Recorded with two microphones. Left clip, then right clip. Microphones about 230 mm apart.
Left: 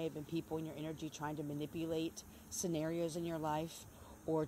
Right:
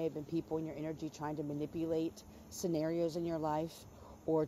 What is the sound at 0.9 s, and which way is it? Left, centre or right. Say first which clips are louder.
Speech: right 2 dB; centre.